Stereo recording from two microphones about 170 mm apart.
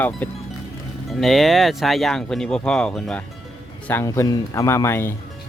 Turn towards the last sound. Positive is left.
turn(degrees=15)  # may be behind; listen again after turning